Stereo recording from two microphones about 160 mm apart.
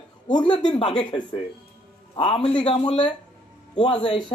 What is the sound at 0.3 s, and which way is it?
Speech, 30° left (ahead or behind).